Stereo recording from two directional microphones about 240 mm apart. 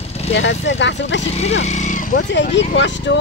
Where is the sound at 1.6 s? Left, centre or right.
Left.